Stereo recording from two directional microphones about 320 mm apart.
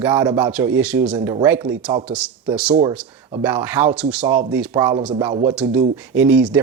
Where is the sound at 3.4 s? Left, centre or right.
Centre.